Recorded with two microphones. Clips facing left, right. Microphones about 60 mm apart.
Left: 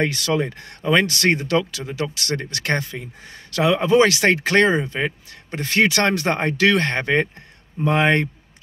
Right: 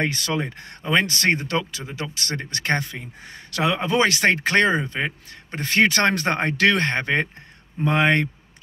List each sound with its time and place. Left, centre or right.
0.0 s speech: right
8.0 s speech: left